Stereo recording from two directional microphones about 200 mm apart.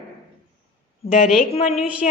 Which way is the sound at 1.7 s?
5° right (ahead or behind).